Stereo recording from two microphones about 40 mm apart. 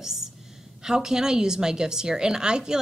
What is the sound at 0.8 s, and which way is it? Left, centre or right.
A woman's voice, centre.